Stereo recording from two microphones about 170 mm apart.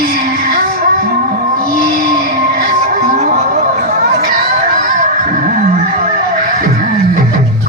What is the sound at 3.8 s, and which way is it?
Chatter, 55° right (ahead or behind).